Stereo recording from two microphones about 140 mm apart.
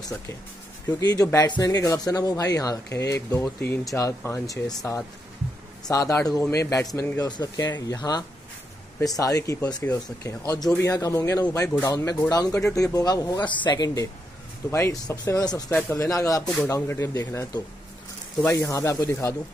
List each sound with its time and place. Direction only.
1.0 s speech: 25° left (ahead or behind)